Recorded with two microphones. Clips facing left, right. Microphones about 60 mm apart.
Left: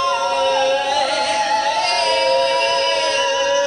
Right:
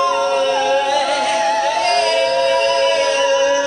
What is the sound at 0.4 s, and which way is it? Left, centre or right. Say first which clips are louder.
Music: right 1 dB; centre.